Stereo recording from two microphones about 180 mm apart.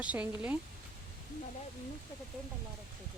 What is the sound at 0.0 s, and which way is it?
Speech, 5° right (ahead or behind).